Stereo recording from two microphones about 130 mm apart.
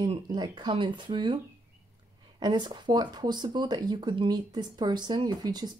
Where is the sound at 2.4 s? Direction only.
35° right (ahead or behind).